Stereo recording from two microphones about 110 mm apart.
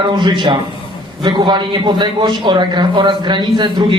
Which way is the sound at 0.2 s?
45° right (ahead or behind).